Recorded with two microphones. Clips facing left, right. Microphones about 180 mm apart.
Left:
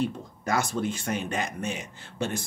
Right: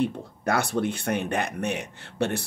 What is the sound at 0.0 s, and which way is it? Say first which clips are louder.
Speech: right 3 dB; 60° right (ahead or behind).